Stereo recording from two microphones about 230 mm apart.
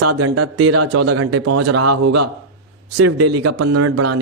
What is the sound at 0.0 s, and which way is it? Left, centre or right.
Speech, right.